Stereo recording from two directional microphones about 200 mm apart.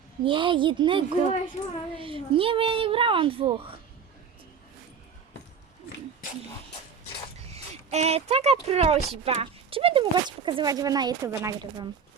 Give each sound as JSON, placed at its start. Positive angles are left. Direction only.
{"t": 0.3, "sound": "speech", "side_deg": -25}
{"t": 1.6, "sound": "speech", "side_deg": 30}
{"t": 2.0, "sound": "speech", "side_deg": -25}
{"t": 7.5, "sound": "a sound", "side_deg": -30}
{"t": 8.6, "sound": "speech", "side_deg": -30}